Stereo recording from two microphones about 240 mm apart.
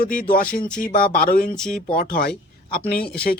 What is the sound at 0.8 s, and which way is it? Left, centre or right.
Speech, left.